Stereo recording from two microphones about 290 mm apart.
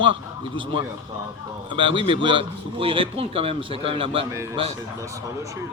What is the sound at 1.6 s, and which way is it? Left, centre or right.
Speech, centre.